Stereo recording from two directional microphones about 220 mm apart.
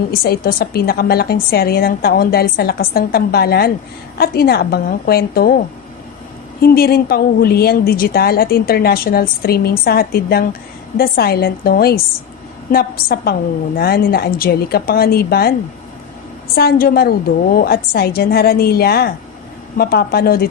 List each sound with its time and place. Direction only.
0.1 s speech: 45° left (ahead or behind)
16.6 s speech: 45° left (ahead or behind)